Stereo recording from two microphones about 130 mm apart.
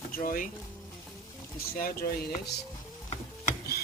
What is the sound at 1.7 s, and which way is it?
Speech, 90° left.